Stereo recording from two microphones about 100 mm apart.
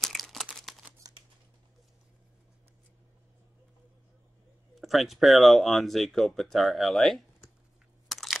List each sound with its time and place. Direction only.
0.0 s crumpling: centre (ahead or behind)
1.0 s scissors: 40° right (ahead or behind)
4.7 s speech: centre (ahead or behind)
8.1 s a sound: centre (ahead or behind)